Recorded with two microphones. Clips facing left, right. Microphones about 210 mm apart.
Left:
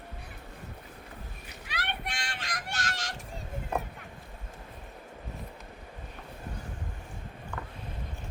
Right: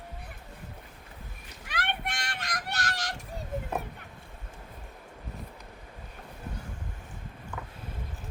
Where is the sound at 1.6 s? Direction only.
50° right (ahead or behind).